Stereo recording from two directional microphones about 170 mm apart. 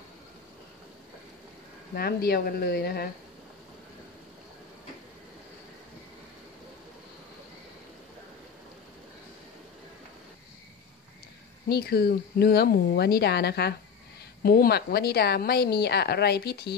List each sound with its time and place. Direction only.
2.0 s a woman's voice: 65° left (ahead or behind)
11.7 s a woman's voice: 65° left (ahead or behind)